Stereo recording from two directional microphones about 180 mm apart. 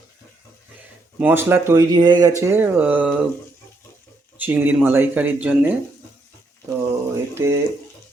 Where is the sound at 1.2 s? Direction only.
10° right (ahead or behind).